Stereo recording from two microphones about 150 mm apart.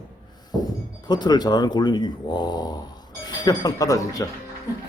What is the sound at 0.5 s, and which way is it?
Speech, 25° left (ahead or behind).